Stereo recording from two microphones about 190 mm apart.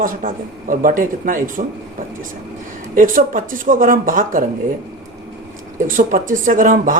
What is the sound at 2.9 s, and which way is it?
Speech, 45° right (ahead or behind).